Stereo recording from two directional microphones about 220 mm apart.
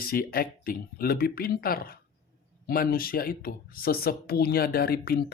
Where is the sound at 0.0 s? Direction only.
40° left (ahead or behind).